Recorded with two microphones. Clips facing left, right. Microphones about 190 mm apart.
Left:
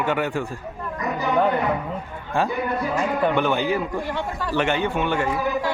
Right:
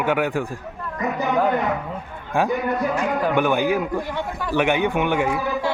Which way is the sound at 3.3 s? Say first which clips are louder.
Right 2 dB; 10° right (ahead or behind).